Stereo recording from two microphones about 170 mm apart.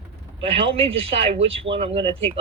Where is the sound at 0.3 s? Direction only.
35° right (ahead or behind).